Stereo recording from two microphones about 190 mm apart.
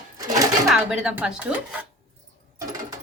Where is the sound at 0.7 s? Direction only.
5° right (ahead or behind).